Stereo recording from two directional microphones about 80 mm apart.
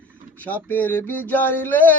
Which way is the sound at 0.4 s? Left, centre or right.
Left.